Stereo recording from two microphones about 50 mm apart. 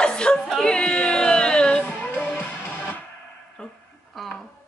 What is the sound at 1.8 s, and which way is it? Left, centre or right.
Music, left.